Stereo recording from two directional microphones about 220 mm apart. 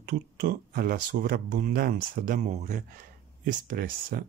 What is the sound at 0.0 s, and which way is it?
Speech, 45° right (ahead or behind).